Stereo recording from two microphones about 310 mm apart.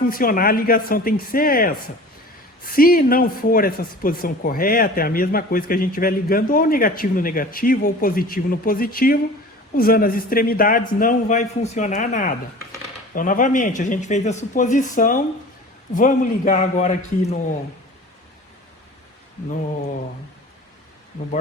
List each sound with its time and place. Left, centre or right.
0.1 s speech: left